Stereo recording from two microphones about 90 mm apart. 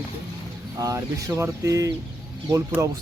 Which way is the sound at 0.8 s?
40° right (ahead or behind).